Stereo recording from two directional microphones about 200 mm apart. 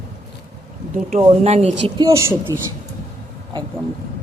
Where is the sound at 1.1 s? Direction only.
30° right (ahead or behind).